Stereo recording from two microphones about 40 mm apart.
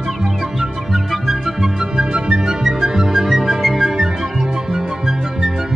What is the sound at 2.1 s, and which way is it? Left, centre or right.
Music, right.